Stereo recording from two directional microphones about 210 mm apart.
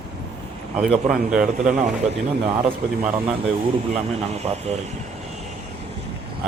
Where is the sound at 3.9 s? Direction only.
30° right (ahead or behind).